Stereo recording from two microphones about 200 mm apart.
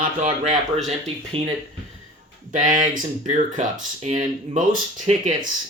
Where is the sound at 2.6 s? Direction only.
40° right (ahead or behind).